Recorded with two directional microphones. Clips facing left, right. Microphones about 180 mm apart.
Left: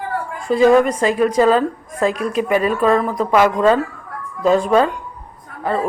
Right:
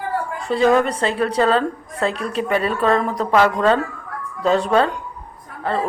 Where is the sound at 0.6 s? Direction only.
10° left (ahead or behind).